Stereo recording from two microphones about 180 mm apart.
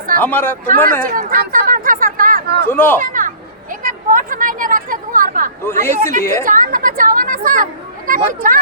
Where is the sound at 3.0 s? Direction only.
50° right (ahead or behind).